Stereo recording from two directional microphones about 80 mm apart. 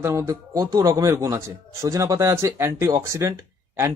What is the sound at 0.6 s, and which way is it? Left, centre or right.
Speech, right.